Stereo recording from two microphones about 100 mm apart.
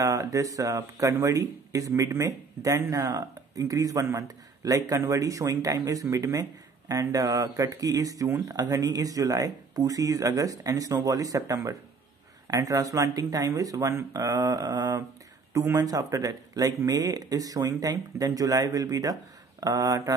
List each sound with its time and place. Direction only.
0.0 s speech: 35° right (ahead or behind)